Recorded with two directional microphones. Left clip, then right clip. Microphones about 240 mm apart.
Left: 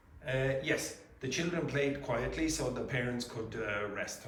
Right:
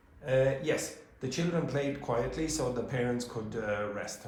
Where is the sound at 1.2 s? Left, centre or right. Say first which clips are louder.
Right 2 dB; centre.